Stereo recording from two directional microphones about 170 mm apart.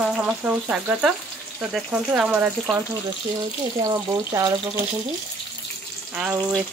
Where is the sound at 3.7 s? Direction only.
20° right (ahead or behind).